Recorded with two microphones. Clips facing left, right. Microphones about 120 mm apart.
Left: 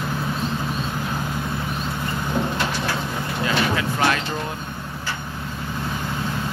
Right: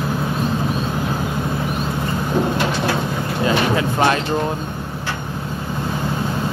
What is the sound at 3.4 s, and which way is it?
Vehicle, 30° right (ahead or behind).